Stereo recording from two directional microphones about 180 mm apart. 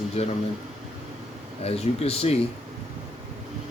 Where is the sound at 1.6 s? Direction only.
35° left (ahead or behind).